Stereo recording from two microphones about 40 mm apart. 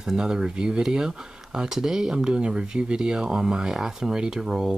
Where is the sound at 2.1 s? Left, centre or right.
Right.